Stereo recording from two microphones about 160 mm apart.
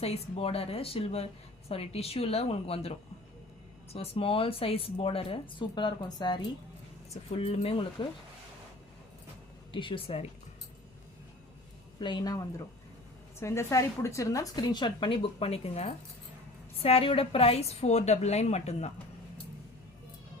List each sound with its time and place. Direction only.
0.0 s speech: 40° left (ahead or behind)
7.1 s speech: 40° left (ahead or behind)
9.7 s speech: 30° left (ahead or behind)
11.9 s a woman's voice: 25° left (ahead or behind); by 18.9 s 45° left (ahead or behind)